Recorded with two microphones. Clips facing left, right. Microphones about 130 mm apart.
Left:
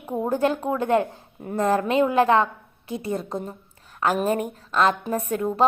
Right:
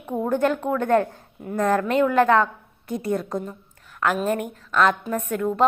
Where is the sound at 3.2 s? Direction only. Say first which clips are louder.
Right 2 dB; 30° left (ahead or behind).